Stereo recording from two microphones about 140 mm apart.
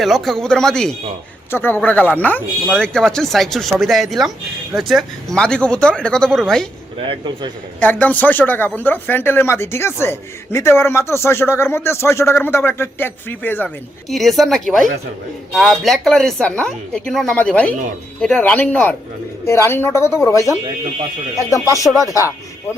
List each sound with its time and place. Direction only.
0.0 s a woman's voice: centre (ahead or behind)
1.5 s a woman's voice: 15° left (ahead or behind)
7.1 s a man's voice: 35° right (ahead or behind)
7.8 s speech: 10° left (ahead or behind)
14.1 s a woman's voice: centre (ahead or behind); by 22.3 s 25° left (ahead or behind)